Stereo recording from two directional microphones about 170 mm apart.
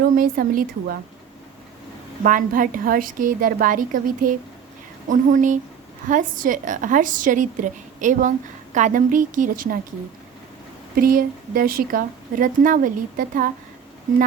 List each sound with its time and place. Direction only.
0.2 s a woman's voice: 55° right (ahead or behind)
2.2 s a woman's voice: 55° right (ahead or behind)
10.9 s a woman's voice: 60° right (ahead or behind)